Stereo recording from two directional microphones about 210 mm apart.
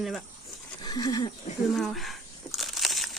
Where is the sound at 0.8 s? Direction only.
20° left (ahead or behind).